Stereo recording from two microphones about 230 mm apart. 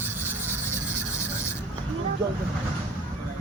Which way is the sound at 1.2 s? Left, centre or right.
Centre.